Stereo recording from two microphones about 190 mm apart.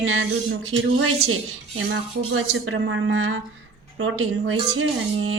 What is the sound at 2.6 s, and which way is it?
Speech, 90° right.